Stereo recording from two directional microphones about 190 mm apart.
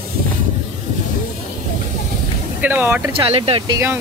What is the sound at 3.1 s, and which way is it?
Speech, 30° right (ahead or behind).